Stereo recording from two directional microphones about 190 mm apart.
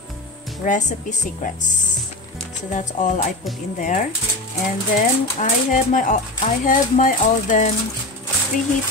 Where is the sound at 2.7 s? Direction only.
40° left (ahead or behind).